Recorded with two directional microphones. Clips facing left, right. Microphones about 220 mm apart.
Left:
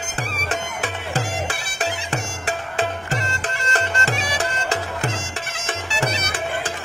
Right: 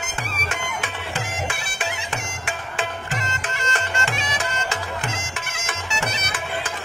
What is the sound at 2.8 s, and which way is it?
Music, 35° left (ahead or behind).